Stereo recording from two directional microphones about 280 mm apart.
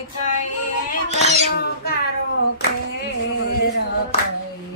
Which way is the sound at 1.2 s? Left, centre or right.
Right.